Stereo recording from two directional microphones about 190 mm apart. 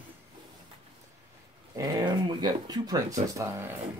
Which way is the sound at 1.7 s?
20° right (ahead or behind).